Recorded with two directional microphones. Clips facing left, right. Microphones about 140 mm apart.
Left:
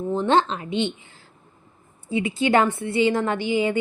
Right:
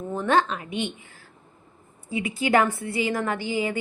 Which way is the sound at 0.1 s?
25° left (ahead or behind).